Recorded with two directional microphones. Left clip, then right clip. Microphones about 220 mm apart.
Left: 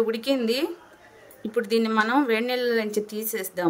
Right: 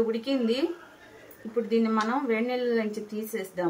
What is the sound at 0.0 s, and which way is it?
Speech, 55° left (ahead or behind).